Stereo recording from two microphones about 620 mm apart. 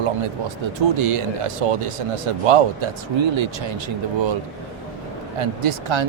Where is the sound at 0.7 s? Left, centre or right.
Right.